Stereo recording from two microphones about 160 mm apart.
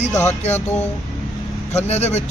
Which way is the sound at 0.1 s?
20° left (ahead or behind).